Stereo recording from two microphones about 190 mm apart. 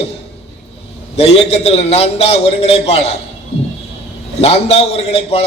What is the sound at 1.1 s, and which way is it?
A man's voice, 35° left (ahead or behind).